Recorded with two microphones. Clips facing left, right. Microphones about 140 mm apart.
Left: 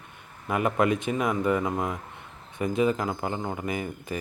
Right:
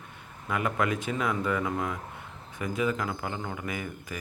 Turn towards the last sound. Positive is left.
turn(degrees=25)  # may be behind; listen again after turning